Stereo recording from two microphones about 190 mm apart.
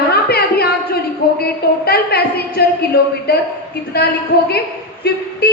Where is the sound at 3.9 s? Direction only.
55° left (ahead or behind).